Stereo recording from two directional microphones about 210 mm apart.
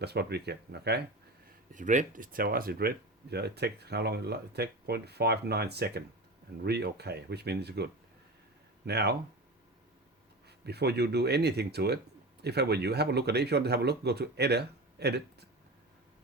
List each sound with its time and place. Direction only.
0.0 s speech: 50° right (ahead or behind)
1.7 s speech: 35° right (ahead or behind); by 9.1 s 50° right (ahead or behind)
10.7 s speech: 50° right (ahead or behind)